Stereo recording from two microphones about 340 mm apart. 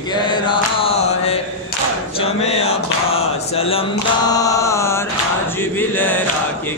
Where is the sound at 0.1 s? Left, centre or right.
Centre.